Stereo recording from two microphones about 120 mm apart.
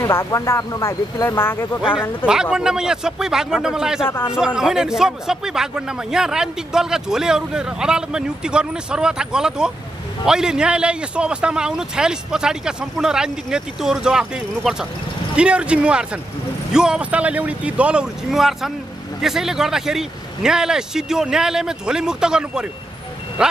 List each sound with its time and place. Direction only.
0.0 s speech: 20° left (ahead or behind)
2.0 s a man's voice: 5° right (ahead or behind)